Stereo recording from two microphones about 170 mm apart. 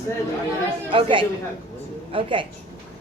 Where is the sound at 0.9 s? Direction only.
30° right (ahead or behind).